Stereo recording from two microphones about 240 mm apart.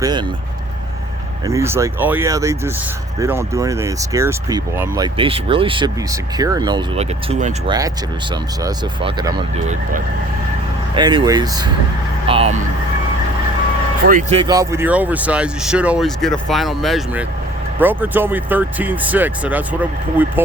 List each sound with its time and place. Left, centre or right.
0.0 s speech: centre
1.5 s speech: centre
10.9 s speech: centre
14.1 s speech: right; by 20.4 s centre